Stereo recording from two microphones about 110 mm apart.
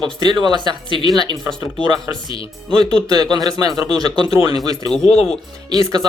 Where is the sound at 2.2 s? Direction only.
55° left (ahead or behind).